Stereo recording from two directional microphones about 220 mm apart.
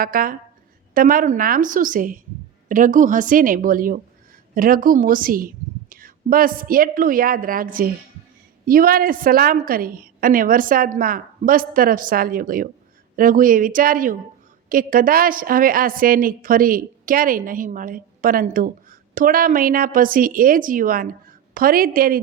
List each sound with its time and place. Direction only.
0.0 s a woman's voice: 40° right (ahead or behind)